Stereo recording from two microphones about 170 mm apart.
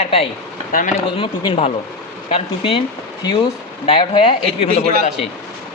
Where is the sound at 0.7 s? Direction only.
55° left (ahead or behind).